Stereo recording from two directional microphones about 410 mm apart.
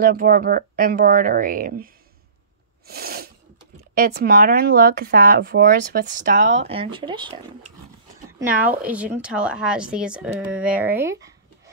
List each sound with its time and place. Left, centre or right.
0.0 s speech: right
2.9 s a woman's voice: right